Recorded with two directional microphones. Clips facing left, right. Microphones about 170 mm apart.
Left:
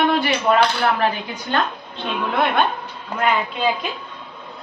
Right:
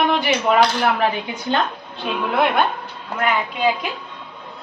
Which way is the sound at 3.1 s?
5° right (ahead or behind).